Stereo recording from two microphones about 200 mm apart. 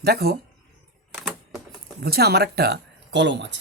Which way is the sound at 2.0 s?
50° right (ahead or behind).